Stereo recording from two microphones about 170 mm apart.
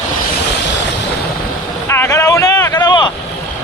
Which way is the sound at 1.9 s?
15° left (ahead or behind).